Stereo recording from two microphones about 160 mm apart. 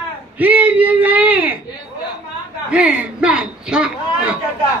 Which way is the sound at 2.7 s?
10° right (ahead or behind).